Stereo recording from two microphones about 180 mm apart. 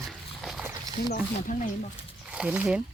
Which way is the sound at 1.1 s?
45° left (ahead or behind).